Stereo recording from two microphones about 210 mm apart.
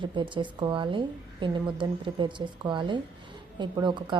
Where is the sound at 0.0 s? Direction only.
25° right (ahead or behind).